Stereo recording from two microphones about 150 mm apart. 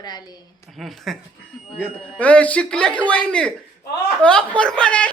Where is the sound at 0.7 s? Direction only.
Centre (ahead or behind).